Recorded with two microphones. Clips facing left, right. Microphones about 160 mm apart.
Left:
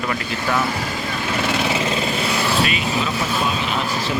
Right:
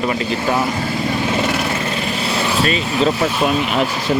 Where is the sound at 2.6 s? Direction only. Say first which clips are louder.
Right 5 dB; 40° right (ahead or behind).